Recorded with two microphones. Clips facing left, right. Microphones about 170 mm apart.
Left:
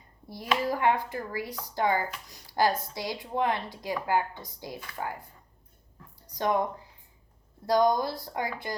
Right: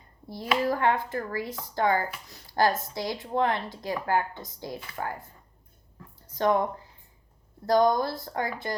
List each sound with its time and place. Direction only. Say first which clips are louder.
0.3 s speech: right 2 dB; 15° left (ahead or behind)
6.2 s speech: right 3 dB; 15° left (ahead or behind)
7.7 s speech: right 2 dB; 15° left (ahead or behind)